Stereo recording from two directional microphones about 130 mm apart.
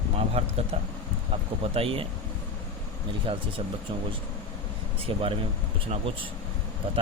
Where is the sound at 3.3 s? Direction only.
45° right (ahead or behind).